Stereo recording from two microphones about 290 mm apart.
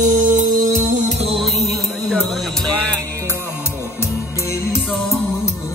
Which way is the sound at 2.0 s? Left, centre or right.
Centre.